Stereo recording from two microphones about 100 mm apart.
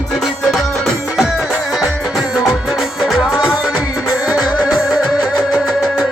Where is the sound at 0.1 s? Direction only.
Centre (ahead or behind).